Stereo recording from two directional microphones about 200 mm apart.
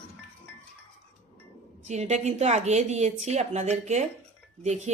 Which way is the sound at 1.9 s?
35° right (ahead or behind).